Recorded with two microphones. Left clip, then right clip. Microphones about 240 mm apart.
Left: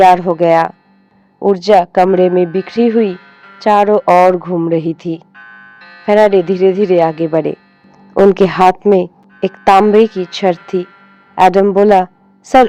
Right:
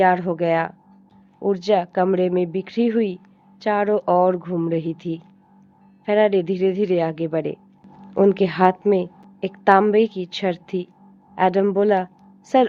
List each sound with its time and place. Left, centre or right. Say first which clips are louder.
0.0 s a woman's voice: left 10 dB; left